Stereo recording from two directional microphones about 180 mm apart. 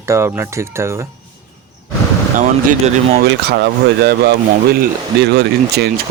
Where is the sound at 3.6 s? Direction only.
65° right (ahead or behind).